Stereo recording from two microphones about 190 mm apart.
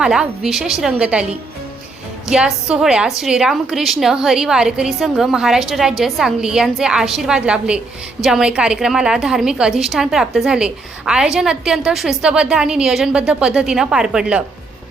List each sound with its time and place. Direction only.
0.0 s a woman's voice: 5° right (ahead or behind)